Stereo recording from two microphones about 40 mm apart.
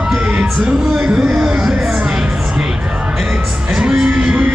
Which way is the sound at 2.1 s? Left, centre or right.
Right.